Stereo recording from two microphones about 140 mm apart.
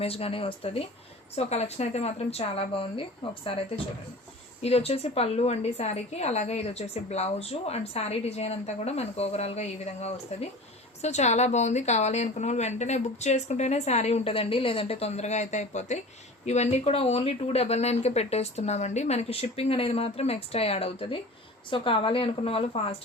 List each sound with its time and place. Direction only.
0.0 s a woman's voice: 45° left (ahead or behind)
4.6 s a woman's voice: 45° left (ahead or behind)